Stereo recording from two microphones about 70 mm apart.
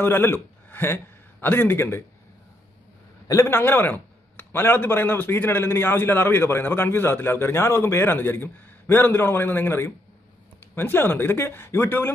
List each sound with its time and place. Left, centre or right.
0.0 s a man's voice: left
3.4 s a man's voice: left